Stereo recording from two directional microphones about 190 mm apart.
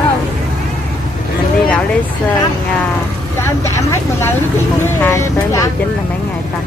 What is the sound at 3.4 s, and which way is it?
Vehicle, 15° left (ahead or behind).